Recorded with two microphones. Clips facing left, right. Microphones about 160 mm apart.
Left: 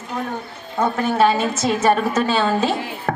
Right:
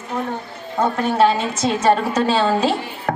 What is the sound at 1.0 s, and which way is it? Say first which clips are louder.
A woman's voice: even; 30° right (ahead or behind).